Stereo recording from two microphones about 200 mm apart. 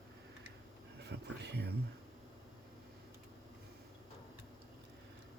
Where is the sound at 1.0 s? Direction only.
60° right (ahead or behind).